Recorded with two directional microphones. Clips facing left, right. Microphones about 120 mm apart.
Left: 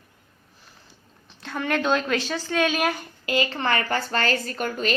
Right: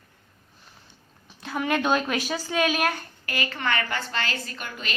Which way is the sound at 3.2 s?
25° left (ahead or behind).